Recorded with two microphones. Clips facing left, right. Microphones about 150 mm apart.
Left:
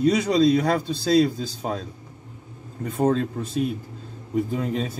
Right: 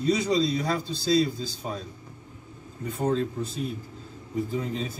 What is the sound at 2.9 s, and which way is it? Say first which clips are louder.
Speech: left 4 dB; 60° left (ahead or behind).